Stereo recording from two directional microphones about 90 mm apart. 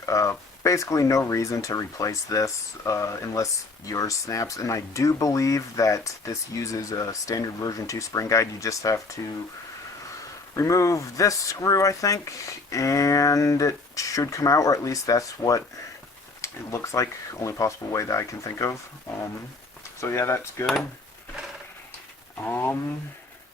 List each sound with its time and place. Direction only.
0.0 s speech: 35° left (ahead or behind)
10.5 s speech: 35° left (ahead or behind)
20.0 s speech: 30° left (ahead or behind)
22.4 s speech: 20° left (ahead or behind)